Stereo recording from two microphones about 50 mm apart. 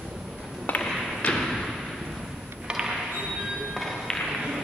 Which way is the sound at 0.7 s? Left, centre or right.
Left.